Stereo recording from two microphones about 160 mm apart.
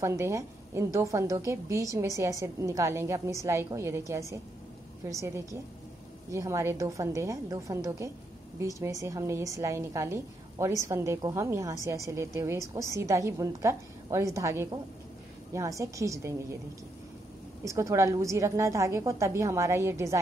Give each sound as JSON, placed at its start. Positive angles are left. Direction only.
{"t": 0.0, "sound": "a woman's voice", "side_deg": -20}
{"t": 17.6, "sound": "a woman's voice", "side_deg": -20}